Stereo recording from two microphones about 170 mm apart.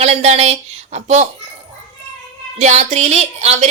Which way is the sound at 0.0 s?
40° right (ahead or behind).